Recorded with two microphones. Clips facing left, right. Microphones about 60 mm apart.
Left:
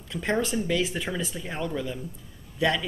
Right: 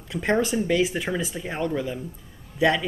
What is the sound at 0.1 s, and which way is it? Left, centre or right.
Speech, centre.